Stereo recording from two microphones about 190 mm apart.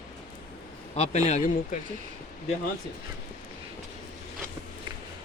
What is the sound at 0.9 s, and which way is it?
Speech, 35° left (ahead or behind).